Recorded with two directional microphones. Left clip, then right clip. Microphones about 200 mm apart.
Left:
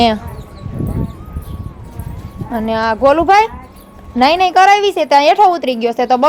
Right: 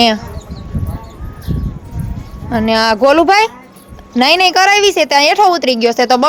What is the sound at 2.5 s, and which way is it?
A woman's voice, 10° right (ahead or behind).